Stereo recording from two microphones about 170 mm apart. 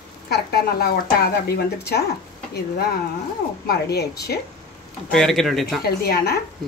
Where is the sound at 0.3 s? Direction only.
65° left (ahead or behind).